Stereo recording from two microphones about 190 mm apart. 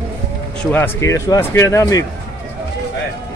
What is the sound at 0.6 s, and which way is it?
Speech, 10° left (ahead or behind).